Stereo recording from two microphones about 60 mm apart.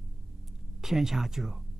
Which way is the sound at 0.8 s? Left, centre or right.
Centre.